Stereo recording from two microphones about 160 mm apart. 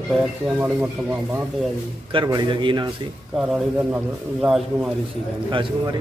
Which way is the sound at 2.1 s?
30° right (ahead or behind).